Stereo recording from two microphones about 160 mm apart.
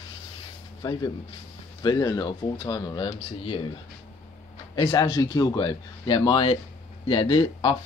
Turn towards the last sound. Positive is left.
turn(degrees=30)  # may be behind; listen again after turning